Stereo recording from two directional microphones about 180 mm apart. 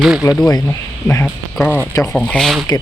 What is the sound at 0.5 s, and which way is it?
Speech, 15° left (ahead or behind).